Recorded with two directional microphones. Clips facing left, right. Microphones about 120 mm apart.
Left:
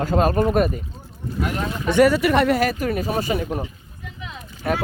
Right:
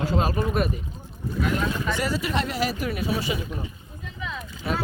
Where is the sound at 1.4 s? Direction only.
65° left (ahead or behind).